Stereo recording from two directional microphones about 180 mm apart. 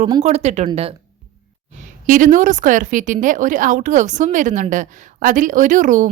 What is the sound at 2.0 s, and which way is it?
A woman's voice, 45° right (ahead or behind).